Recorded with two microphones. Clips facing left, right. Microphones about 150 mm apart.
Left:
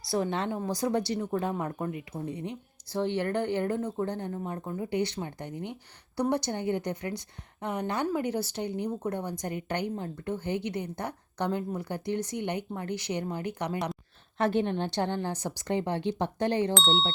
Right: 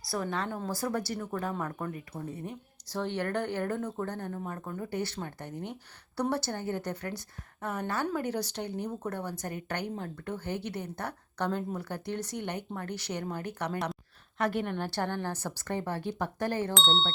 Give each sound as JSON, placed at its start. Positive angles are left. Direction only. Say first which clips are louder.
{"t": 0.1, "sound": "a woman's voice", "louder": "left 4 dB", "side_deg": 25}
{"t": 14.3, "sound": "a woman's voice", "louder": "left 4 dB", "side_deg": 25}
{"t": 16.7, "sound": "speech", "louder": "left 2 dB", "side_deg": 0}